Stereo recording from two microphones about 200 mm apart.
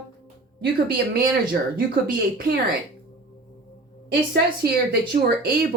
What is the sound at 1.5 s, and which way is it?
Speech, 50° right (ahead or behind).